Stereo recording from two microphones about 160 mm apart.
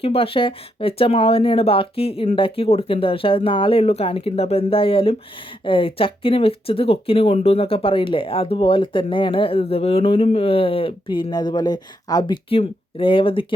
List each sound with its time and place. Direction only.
0.0 s speech: 35° left (ahead or behind)